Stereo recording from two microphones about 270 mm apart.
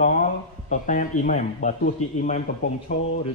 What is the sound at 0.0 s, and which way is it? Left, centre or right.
Speech, left.